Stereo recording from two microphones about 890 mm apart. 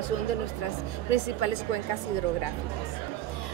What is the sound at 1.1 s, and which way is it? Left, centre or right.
Speech, left.